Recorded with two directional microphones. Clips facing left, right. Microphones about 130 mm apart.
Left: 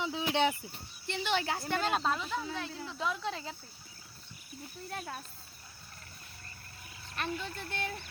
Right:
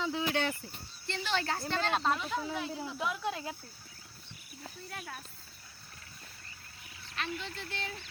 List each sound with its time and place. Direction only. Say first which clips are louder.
0.0 s cricket: left 2 dB; 15° left (ahead or behind)
1.0 s a woman's voice: left 1 dB; 15° left (ahead or behind)
2.0 s speech: right 1 dB; centre (ahead or behind)
4.9 s speech: left 5 dB; 35° left (ahead or behind)
7.2 s speech: left 2 dB; 45° left (ahead or behind)